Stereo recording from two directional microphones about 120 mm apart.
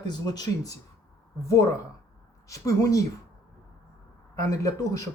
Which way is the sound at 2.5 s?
25° left (ahead or behind).